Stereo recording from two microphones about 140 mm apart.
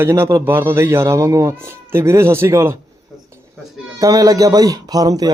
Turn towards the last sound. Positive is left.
turn(degrees=-25)  # may be behind; listen again after turning